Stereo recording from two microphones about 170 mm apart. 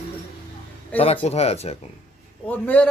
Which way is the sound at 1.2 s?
40° left (ahead or behind).